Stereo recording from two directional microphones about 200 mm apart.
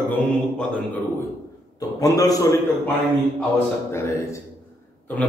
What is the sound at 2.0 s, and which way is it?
A man's voice, 15° left (ahead or behind).